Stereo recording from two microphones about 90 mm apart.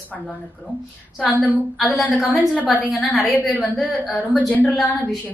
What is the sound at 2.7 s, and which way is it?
Speech, centre (ahead or behind).